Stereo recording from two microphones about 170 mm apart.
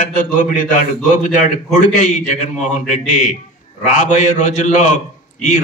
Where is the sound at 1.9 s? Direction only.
45° left (ahead or behind).